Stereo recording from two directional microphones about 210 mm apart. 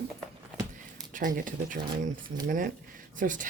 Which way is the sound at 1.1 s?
40° right (ahead or behind).